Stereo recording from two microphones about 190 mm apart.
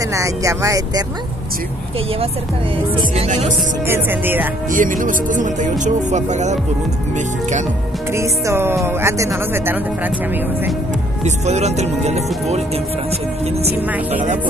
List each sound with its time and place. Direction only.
0.1 s speech: 15° right (ahead or behind)
3.3 s speech: 40° right (ahead or behind)
3.8 s speech: 10° right (ahead or behind)
4.6 s speech: 45° right (ahead or behind)
8.1 s speech: 15° right (ahead or behind)
11.2 s speech: 35° right (ahead or behind)
13.7 s speech: 10° right (ahead or behind)